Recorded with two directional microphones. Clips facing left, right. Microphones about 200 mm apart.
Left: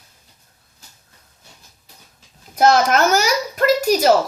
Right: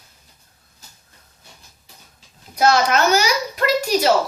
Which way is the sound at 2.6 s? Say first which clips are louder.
Left 2 dB; 50° left (ahead or behind).